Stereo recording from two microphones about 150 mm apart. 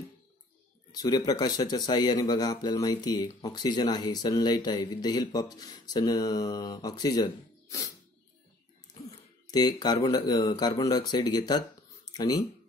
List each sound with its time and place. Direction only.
0.9 s speech: 25° left (ahead or behind)
9.5 s speech: 25° left (ahead or behind)